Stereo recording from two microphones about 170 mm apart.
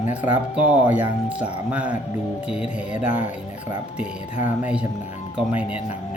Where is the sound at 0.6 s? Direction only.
10° right (ahead or behind).